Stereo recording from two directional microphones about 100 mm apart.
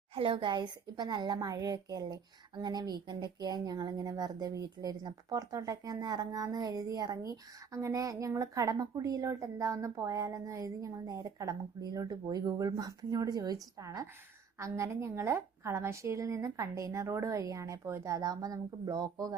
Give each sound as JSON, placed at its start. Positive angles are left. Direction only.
{"t": 0.1, "sound": "a woman's voice", "side_deg": -60}